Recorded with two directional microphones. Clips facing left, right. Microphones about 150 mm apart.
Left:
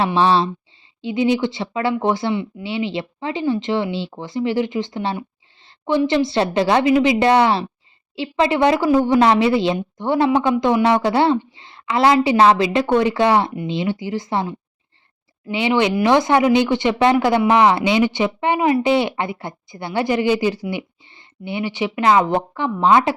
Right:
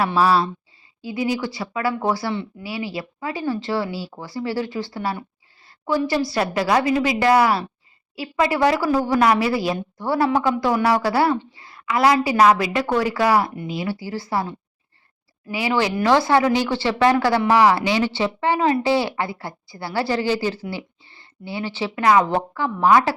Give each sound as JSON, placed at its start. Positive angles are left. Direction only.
{"t": 0.0, "sound": "speech", "side_deg": 25}
{"t": 5.6, "sound": "a sound", "side_deg": 25}
{"t": 6.0, "sound": "speech", "side_deg": 20}